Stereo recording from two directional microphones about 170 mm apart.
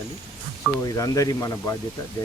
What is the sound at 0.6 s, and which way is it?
Speech, centre (ahead or behind).